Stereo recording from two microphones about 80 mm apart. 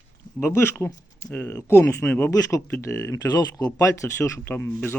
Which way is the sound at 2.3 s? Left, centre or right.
Left.